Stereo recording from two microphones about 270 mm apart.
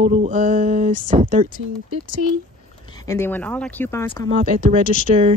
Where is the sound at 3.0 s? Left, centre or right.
Centre.